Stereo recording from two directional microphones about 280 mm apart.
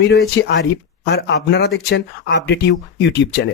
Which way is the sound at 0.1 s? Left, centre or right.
Left.